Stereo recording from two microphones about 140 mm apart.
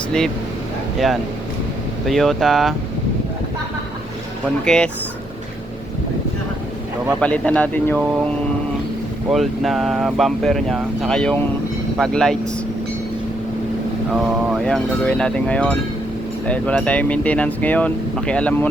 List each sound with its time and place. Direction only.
0.9 s speech: centre (ahead or behind)
4.6 s speech: 5° left (ahead or behind)
7.2 s speech: 10° left (ahead or behind)
9.3 s speech: centre (ahead or behind)
14.1 s speech: 5° right (ahead or behind)
14.6 s speech: 5° left (ahead or behind)